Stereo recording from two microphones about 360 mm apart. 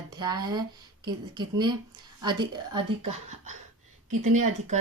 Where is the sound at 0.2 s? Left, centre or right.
Centre.